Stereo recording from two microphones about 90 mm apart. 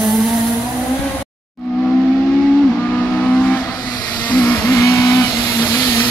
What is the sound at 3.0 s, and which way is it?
Vehicle, 10° left (ahead or behind).